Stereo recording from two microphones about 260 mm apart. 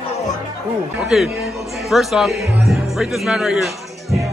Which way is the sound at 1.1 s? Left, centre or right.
Centre.